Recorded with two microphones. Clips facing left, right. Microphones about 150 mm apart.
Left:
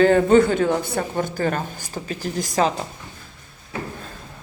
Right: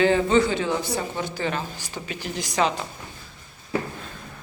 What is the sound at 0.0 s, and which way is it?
A man's voice, 50° left (ahead or behind).